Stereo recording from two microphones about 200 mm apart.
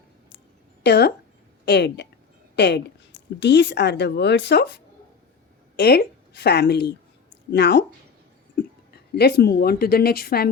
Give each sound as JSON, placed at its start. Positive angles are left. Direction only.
{"t": 0.8, "sound": "a woman's voice", "side_deg": 55}
{"t": 9.1, "sound": "a woman's voice", "side_deg": 55}